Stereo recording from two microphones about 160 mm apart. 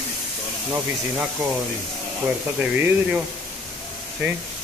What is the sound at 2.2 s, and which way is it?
Speech, 10° right (ahead or behind).